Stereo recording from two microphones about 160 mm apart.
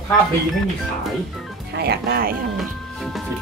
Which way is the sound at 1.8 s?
85° right.